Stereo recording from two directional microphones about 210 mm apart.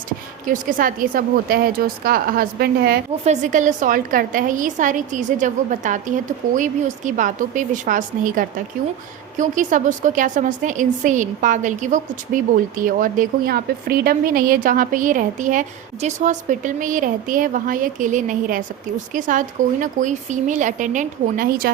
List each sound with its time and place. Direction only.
0.4 s a woman's voice: 40° right (ahead or behind)
3.2 s a woman's voice: 35° right (ahead or behind)